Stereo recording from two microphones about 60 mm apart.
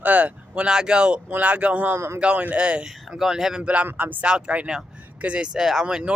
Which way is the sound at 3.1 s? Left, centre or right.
Centre.